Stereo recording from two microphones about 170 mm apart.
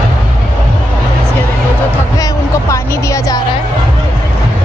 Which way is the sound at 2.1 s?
20° left (ahead or behind).